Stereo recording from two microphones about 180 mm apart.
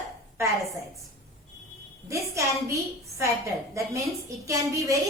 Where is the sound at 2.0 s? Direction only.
15° right (ahead or behind).